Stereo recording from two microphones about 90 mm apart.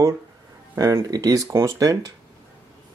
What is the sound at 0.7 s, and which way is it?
Speech, 40° right (ahead or behind).